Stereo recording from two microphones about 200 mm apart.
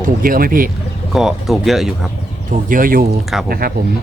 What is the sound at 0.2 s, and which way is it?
Speech, 45° right (ahead or behind).